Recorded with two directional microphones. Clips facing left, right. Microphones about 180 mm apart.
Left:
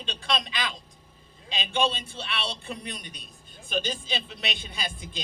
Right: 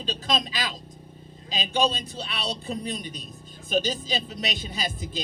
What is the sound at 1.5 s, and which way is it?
A man's voice, 40° right (ahead or behind).